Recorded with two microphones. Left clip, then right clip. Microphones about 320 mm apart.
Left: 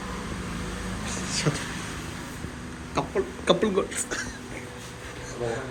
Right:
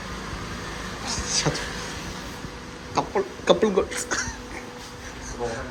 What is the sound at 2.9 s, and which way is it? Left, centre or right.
A woman's voice, centre.